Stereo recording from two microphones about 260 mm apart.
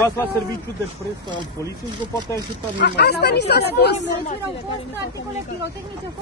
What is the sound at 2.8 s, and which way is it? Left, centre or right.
Speech, left.